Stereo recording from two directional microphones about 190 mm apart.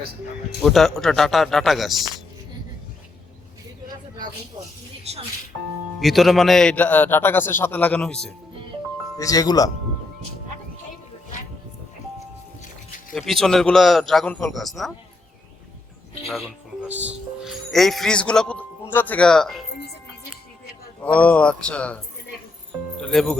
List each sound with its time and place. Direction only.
0.6 s a man's voice: centre (ahead or behind)
6.0 s a man's voice: centre (ahead or behind)
9.1 s speech: 20° left (ahead or behind)
13.1 s a man's voice: centre (ahead or behind)
16.3 s speech: 5° right (ahead or behind)
21.0 s a man's voice: 5° left (ahead or behind)